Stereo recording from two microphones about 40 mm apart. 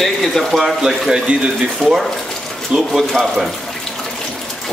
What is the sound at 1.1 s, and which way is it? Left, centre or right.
Speech, right.